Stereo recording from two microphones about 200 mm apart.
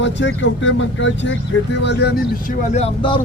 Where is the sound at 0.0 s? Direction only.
65° left (ahead or behind).